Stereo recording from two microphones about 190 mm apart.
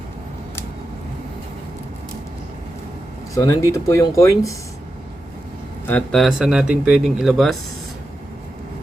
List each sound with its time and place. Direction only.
3.3 s speech: 15° left (ahead or behind)
5.9 s speech: centre (ahead or behind)